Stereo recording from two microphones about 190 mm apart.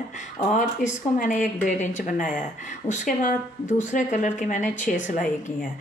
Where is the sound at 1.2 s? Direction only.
45° left (ahead or behind).